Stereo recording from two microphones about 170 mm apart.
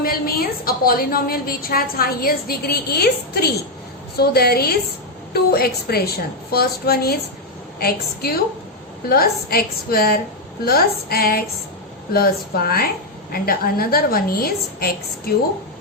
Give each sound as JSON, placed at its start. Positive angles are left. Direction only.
{"t": 0.0, "sound": "a woman's voice", "side_deg": 60}